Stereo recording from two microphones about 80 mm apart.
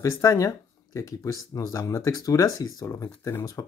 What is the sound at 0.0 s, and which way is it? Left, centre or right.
Speech, left.